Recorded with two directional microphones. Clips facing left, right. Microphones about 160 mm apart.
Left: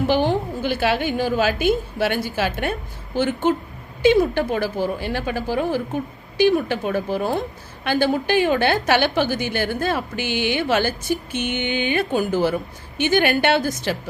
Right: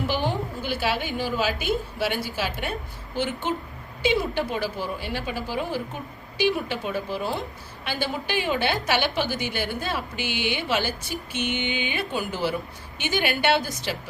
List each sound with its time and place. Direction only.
0.6 s a woman's voice: 55° left (ahead or behind)
4.0 s a woman's voice: 50° left (ahead or behind)